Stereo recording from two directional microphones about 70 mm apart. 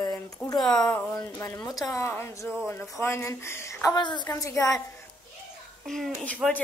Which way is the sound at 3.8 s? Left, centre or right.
Left.